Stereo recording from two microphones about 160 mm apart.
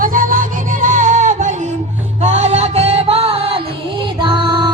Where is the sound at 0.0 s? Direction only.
60° right (ahead or behind).